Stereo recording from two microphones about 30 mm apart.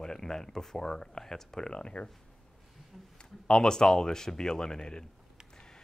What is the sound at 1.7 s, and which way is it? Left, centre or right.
Speech, left.